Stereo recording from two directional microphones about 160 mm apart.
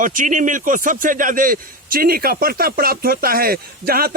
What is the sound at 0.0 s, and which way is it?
A man's voice, 55° right (ahead or behind).